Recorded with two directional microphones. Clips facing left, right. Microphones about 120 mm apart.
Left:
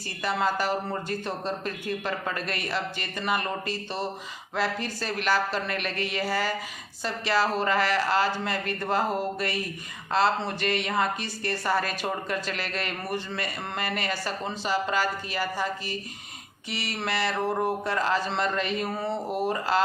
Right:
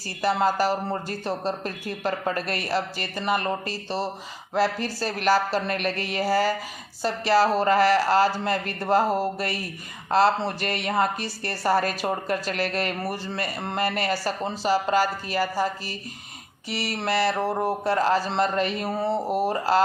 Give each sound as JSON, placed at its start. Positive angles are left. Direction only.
{"t": 0.2, "sound": "a woman's voice", "side_deg": -35}